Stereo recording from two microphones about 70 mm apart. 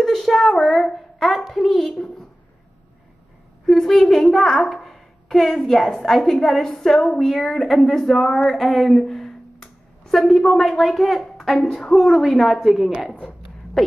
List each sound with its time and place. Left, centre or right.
0.0 s a woman's voice: centre
3.6 s a woman's voice: centre
13.8 s a sound: centre